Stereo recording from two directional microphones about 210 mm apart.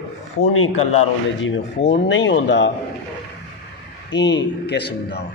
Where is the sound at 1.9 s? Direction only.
60° left (ahead or behind).